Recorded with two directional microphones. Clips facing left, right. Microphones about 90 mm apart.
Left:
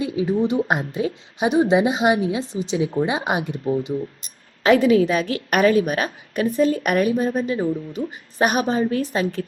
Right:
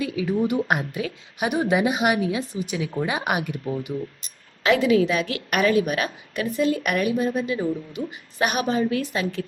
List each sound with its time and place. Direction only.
0.0 s a woman's voice: 25° left (ahead or behind)
4.6 s a woman's voice: 40° left (ahead or behind)